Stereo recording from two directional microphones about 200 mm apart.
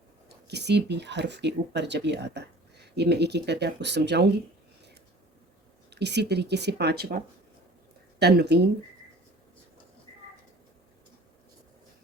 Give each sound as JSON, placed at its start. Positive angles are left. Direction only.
{"t": 0.4, "sound": "speech", "side_deg": -55}
{"t": 5.9, "sound": "speech", "side_deg": -55}
{"t": 8.2, "sound": "speech", "side_deg": -55}